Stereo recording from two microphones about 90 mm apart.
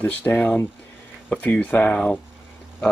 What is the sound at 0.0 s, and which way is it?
Speech, 20° left (ahead or behind).